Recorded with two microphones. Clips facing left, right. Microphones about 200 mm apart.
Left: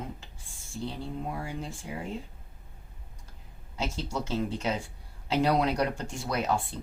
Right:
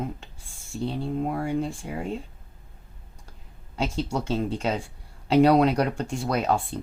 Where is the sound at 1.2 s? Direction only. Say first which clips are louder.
Right 12 dB; 55° right (ahead or behind).